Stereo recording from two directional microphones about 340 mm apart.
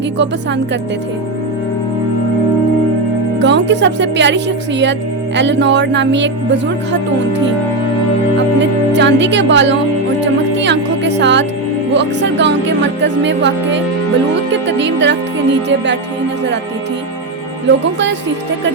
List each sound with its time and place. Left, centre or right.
3.4 s speech: right
8.9 s speech: right
10.6 s music: right
11.9 s speech: right